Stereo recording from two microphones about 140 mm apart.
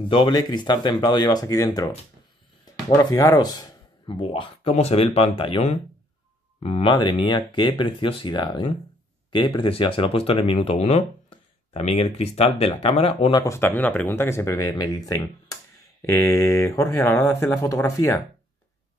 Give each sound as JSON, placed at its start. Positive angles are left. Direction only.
{"t": 0.1, "sound": "speech", "side_deg": 30}
{"t": 2.9, "sound": "speech", "side_deg": 25}
{"t": 4.1, "sound": "speech", "side_deg": 40}
{"t": 13.3, "sound": "speech", "side_deg": 20}